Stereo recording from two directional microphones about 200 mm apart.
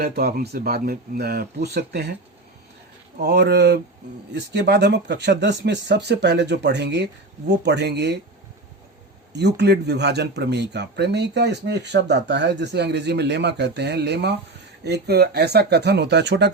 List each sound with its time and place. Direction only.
0.0 s speech: 50° right (ahead or behind)
3.2 s speech: 55° right (ahead or behind)
9.3 s speech: 60° right (ahead or behind)